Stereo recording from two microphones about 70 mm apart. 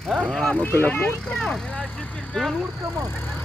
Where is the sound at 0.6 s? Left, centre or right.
Left.